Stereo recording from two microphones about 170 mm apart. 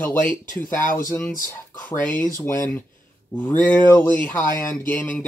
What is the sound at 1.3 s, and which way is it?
Speech, 55° left (ahead or behind).